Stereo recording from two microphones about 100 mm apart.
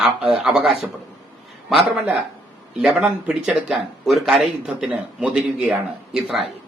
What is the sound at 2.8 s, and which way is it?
Speech, 5° right (ahead or behind).